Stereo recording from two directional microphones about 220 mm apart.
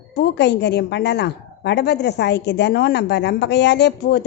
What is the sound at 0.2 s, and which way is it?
A woman's voice, 50° left (ahead or behind).